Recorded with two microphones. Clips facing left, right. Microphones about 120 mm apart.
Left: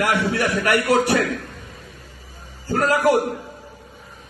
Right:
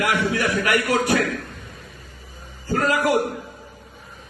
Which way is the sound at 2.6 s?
30° left (ahead or behind).